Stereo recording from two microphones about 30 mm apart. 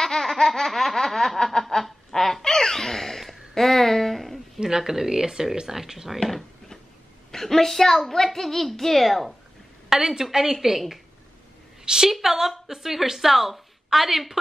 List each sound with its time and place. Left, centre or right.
0.0 s baby laughter: centre
1.8 s a sound: centre
2.4 s baby laughter: centre
3.2 s a sound: centre
4.6 s a sound: right
4.8 s speech: centre
7.2 s a child's voice: centre
9.8 s a woman's voice: centre
11.8 s a woman's voice: right